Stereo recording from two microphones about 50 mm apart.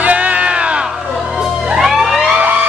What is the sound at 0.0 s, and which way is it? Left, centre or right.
Music, right.